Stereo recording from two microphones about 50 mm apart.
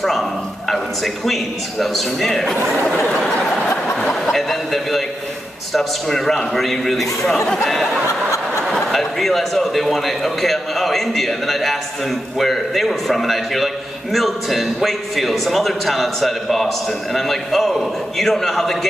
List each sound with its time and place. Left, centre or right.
0.0 s a man's voice: centre
3.7 s a sound: left
4.1 s a man's voice: centre